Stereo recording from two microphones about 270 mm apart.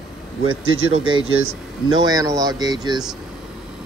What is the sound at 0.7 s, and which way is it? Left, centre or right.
Speech, right.